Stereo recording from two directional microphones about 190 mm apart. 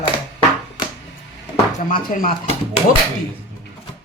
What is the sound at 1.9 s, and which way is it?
Speech, 45° left (ahead or behind).